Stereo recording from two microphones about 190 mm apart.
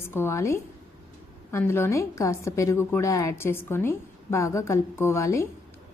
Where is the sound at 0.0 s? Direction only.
10° left (ahead or behind).